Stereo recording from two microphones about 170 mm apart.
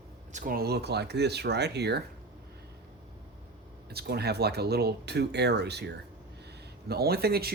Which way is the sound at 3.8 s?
70° right (ahead or behind).